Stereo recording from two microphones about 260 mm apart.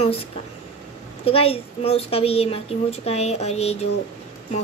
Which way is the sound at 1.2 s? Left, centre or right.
Left.